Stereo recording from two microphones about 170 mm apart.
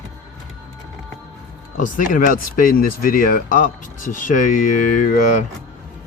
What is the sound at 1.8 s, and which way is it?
Speech, 50° left (ahead or behind).